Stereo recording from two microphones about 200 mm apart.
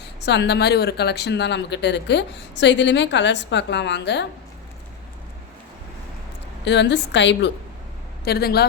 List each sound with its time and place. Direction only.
0.3 s speech: 60° left (ahead or behind)
6.7 s speech: 60° left (ahead or behind)
8.2 s speech: 50° left (ahead or behind)